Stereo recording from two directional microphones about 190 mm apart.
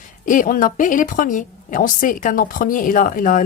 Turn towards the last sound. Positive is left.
turn(degrees=45)  # may be behind; listen again after turning